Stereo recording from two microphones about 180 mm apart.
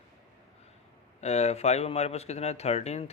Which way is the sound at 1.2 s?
35° left (ahead or behind).